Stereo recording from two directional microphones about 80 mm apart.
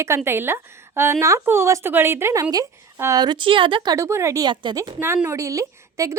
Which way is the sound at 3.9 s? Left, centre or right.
Right.